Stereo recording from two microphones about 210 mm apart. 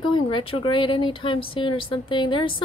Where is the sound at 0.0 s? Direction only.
25° left (ahead or behind).